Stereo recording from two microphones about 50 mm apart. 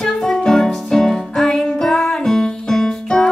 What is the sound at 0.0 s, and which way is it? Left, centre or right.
Music, centre.